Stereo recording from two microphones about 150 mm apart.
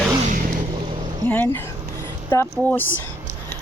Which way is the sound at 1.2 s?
10° left (ahead or behind).